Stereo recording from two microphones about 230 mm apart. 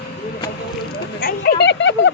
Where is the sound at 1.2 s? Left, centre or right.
Left.